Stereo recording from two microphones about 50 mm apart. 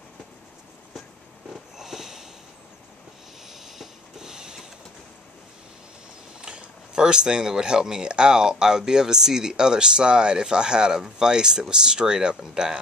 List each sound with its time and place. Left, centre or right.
1.8 s sniff: centre
3.4 s printer: centre
6.4 s speech: centre